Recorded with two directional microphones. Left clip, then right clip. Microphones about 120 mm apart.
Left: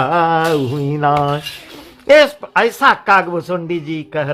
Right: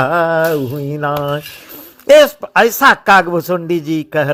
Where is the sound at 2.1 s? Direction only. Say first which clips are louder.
Right 2 dB; 30° right (ahead or behind).